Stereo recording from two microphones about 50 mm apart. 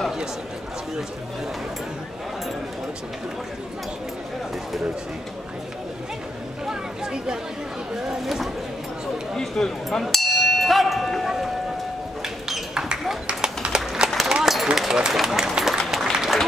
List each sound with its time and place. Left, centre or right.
6.6 s a sound: centre
8.1 s speech: centre
10.1 s bell: centre
11.2 s a sound: centre
13.3 s run: centre
15.9 s applause: centre